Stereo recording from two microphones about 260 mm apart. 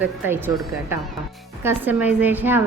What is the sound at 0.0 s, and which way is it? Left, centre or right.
A woman's voice, centre.